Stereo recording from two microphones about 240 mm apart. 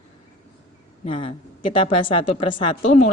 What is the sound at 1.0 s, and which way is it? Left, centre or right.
A woman's voice, left.